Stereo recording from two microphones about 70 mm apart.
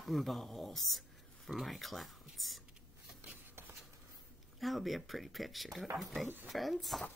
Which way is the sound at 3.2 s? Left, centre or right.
Right.